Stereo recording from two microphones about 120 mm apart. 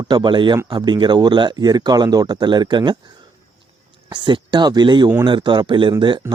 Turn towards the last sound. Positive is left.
turn(degrees=-40)  # may be behind; listen again after turning